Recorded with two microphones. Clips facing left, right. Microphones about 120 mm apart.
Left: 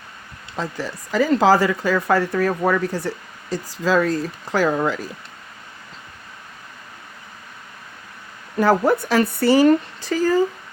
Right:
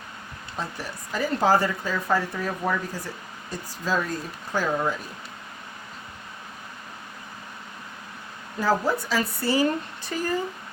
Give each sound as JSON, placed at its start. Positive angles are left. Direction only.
{"t": 0.5, "sound": "speech", "side_deg": 90}
{"t": 3.5, "sound": "speech", "side_deg": 90}
{"t": 8.5, "sound": "speech", "side_deg": 65}